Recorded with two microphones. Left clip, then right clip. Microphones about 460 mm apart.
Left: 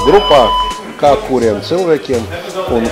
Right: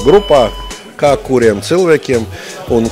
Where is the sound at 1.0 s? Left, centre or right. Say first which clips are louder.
Right 1 dB; right.